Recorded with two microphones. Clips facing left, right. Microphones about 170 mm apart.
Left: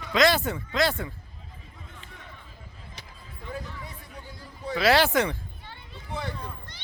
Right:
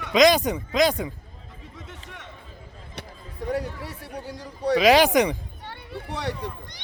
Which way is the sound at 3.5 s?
75° right (ahead or behind).